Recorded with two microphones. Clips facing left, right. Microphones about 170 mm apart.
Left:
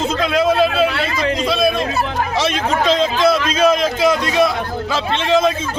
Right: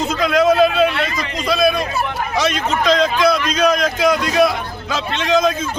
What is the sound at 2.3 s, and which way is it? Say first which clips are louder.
Speech: right 1 dB; 30° left (ahead or behind).